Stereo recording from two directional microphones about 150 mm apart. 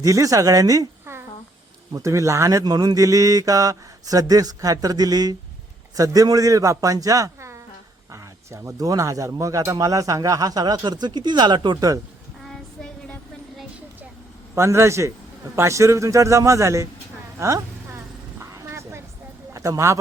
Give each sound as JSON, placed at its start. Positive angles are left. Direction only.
{"t": 0.0, "sound": "speech", "side_deg": -20}
{"t": 12.5, "sound": "child singing", "side_deg": 5}
{"t": 14.5, "sound": "speech", "side_deg": -20}
{"t": 17.4, "sound": "vehicle", "side_deg": -20}
{"t": 19.5, "sound": "speech", "side_deg": -20}